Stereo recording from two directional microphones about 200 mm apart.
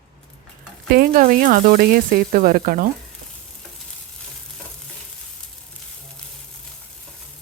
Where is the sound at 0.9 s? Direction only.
50° right (ahead or behind).